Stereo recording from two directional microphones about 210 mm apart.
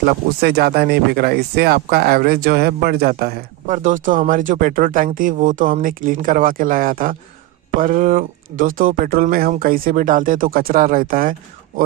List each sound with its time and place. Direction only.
0.0 s speech: 50° right (ahead or behind)